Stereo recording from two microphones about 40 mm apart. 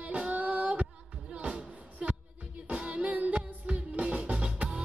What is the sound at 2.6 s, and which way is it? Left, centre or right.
Music, right.